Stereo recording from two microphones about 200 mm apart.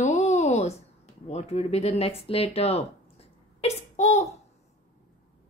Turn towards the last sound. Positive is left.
turn(degrees=35)  # may be behind; listen again after turning